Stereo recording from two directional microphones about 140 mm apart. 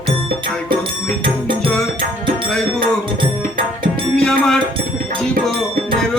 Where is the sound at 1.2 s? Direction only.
35° right (ahead or behind).